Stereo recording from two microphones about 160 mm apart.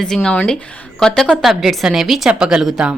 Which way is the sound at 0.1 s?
5° left (ahead or behind).